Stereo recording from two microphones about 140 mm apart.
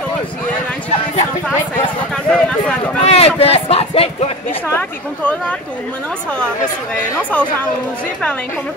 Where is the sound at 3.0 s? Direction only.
45° left (ahead or behind).